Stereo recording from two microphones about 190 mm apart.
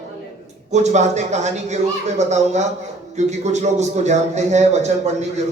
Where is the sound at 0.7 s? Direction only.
35° right (ahead or behind).